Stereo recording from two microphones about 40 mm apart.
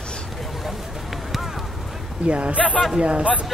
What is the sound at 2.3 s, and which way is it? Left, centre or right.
Speech, right.